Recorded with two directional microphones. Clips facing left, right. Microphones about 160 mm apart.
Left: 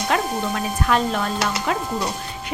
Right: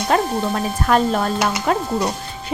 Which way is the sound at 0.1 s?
40° right (ahead or behind).